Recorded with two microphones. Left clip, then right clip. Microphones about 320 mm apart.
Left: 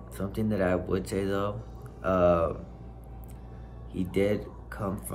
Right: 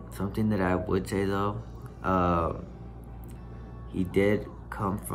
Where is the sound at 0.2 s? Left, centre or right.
Centre.